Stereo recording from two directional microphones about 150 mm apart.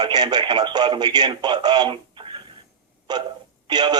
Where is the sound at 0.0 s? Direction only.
30° right (ahead or behind).